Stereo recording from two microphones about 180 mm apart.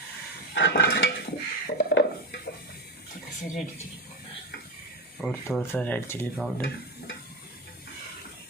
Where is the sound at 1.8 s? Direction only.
70° left (ahead or behind).